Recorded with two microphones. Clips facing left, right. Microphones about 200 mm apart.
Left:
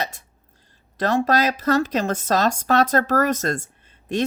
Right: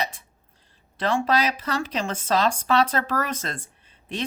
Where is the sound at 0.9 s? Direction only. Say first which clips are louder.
Left 3 dB; 40° left (ahead or behind).